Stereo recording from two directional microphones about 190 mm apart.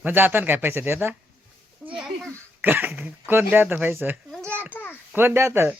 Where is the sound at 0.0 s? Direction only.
10° right (ahead or behind).